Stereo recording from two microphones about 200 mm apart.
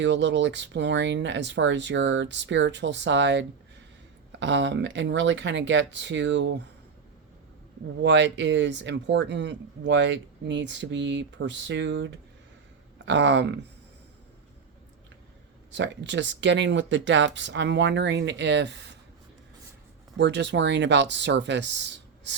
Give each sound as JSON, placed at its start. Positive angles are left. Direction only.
{"t": 0.0, "sound": "speech", "side_deg": -60}
{"t": 8.0, "sound": "speech", "side_deg": -65}
{"t": 15.7, "sound": "speech", "side_deg": -65}
{"t": 20.1, "sound": "speech", "side_deg": -60}